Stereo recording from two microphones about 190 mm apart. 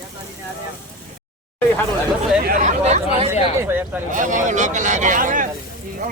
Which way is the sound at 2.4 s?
45° right (ahead or behind).